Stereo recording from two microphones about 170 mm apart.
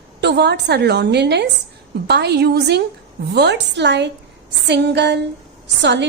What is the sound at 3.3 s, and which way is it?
A woman's voice, 90° right.